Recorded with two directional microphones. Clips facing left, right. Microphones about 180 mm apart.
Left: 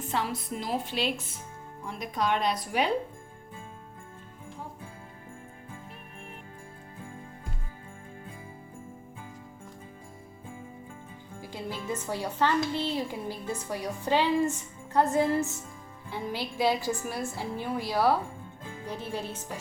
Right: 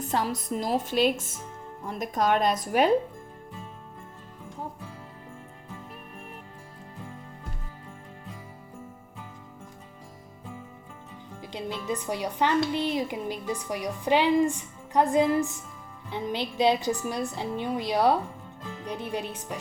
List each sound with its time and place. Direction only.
0.0 s a woman's voice: 40° right (ahead or behind)
11.3 s music: 20° right (ahead or behind)
11.9 s a woman's voice: 15° right (ahead or behind)